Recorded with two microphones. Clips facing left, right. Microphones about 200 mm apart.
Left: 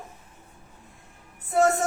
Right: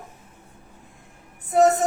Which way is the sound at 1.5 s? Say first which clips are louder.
Right 4 dB; 20° right (ahead or behind).